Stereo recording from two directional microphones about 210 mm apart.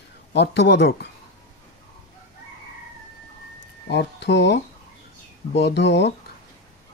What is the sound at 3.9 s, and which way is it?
Speech, 55° left (ahead or behind).